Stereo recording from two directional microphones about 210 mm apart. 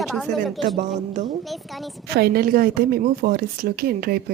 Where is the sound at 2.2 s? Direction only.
45° right (ahead or behind).